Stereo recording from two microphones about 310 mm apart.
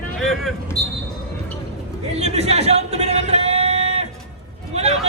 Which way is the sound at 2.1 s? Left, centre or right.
Centre.